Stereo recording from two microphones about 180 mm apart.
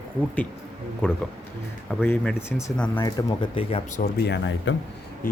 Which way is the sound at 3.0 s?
20° left (ahead or behind).